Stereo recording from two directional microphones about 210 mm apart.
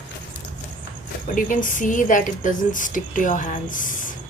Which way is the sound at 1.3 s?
40° left (ahead or behind).